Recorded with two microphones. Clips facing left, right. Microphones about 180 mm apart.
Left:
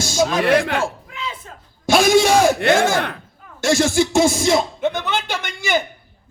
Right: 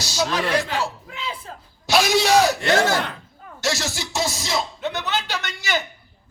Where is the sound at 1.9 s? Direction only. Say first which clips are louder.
Left 4 dB; 50° left (ahead or behind).